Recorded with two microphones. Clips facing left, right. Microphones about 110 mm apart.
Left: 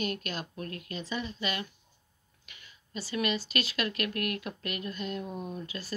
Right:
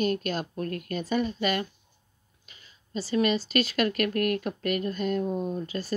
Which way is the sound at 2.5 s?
35° right (ahead or behind).